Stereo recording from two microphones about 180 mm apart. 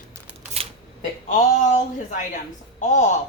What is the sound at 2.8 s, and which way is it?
Speech, 40° left (ahead or behind).